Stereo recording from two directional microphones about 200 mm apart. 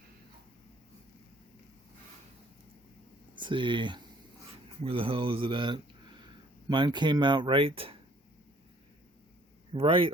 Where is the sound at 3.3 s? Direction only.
25° right (ahead or behind).